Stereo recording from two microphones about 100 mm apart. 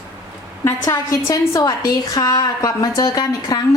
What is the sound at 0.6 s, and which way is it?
A woman's voice, 30° left (ahead or behind).